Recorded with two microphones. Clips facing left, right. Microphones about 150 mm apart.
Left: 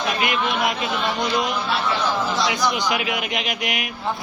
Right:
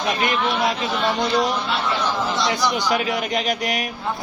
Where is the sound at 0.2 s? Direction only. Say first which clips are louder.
Right 1 dB; 30° right (ahead or behind).